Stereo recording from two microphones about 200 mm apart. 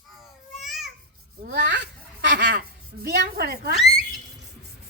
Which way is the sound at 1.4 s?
55° right (ahead or behind).